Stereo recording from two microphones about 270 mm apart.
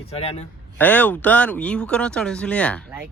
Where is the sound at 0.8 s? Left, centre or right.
Centre.